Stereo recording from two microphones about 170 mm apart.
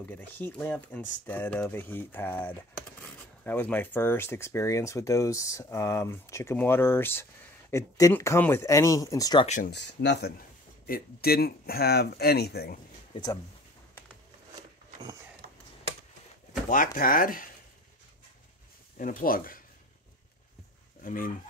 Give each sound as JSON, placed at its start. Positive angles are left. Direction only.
{"t": 0.1, "sound": "speech", "side_deg": 10}
{"t": 9.7, "sound": "speech", "side_deg": 85}
{"t": 10.9, "sound": "speech", "side_deg": 65}
{"t": 13.1, "sound": "speech", "side_deg": 20}
{"t": 15.4, "sound": "a sound", "side_deg": -65}
{"t": 16.6, "sound": "speech", "side_deg": 50}
{"t": 18.9, "sound": "speech", "side_deg": 50}
{"t": 21.0, "sound": "speech", "side_deg": 55}